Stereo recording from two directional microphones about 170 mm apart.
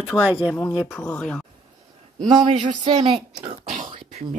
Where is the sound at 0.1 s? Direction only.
10° left (ahead or behind).